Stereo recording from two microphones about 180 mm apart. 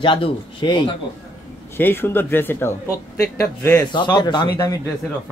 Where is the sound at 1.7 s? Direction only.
10° left (ahead or behind).